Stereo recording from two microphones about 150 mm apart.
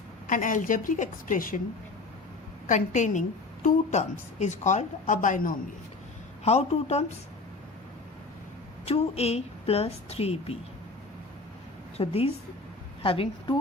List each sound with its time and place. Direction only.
0.3 s a woman's voice: 60° left (ahead or behind)
2.6 s a woman's voice: 55° left (ahead or behind)
6.4 s a woman's voice: 45° left (ahead or behind)
8.8 s a woman's voice: 45° left (ahead or behind)
11.9 s a woman's voice: 40° left (ahead or behind)